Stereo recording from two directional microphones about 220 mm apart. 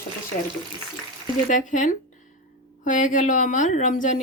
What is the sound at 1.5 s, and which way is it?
A woman's voice, 35° left (ahead or behind).